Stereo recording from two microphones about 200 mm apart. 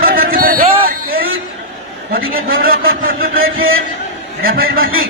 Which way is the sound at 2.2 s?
45° right (ahead or behind).